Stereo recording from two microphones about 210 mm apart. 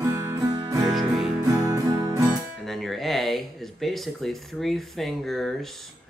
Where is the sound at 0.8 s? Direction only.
Centre (ahead or behind).